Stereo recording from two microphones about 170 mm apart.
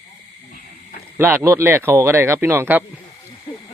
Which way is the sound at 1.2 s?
15° right (ahead or behind).